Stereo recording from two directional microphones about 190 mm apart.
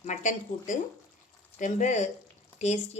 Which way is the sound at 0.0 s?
40° left (ahead or behind).